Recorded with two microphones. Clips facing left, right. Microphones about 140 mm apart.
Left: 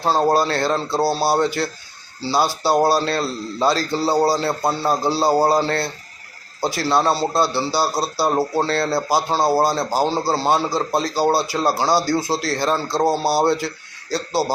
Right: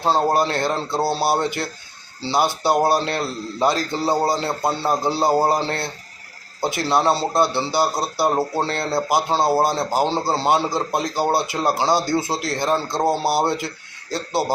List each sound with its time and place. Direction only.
0.3 s a man's voice: 20° right (ahead or behind)